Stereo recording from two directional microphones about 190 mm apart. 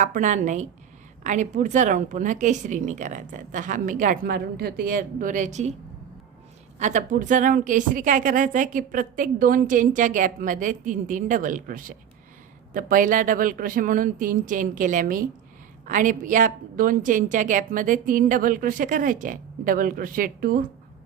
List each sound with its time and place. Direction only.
0.0 s a woman's voice: 40° right (ahead or behind)
6.7 s a woman's voice: 40° right (ahead or behind)